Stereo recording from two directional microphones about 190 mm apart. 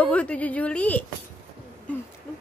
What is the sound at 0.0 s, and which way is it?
Speech, 5° left (ahead or behind).